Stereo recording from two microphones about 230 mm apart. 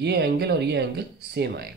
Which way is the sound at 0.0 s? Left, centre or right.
Right.